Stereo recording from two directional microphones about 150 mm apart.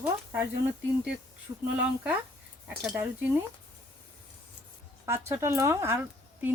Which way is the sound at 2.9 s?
10° right (ahead or behind).